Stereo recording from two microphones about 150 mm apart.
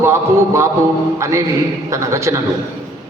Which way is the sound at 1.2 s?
20° right (ahead or behind).